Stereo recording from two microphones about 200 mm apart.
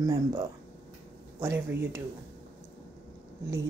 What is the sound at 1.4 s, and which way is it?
Speech, 10° right (ahead or behind).